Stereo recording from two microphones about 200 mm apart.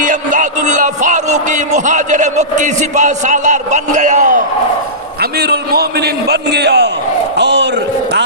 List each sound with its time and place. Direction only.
0.0 s music: 40° right (ahead or behind)
5.2 s a man's voice: 50° right (ahead or behind)